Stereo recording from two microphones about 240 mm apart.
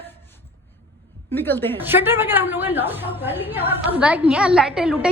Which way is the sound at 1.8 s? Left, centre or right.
Centre.